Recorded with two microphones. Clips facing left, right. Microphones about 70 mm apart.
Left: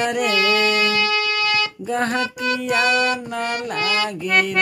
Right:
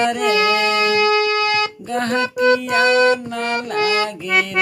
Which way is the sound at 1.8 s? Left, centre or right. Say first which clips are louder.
Right 1 dB; centre.